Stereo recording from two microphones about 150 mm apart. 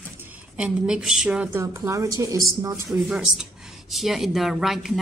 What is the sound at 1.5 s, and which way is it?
A woman's voice, 20° right (ahead or behind).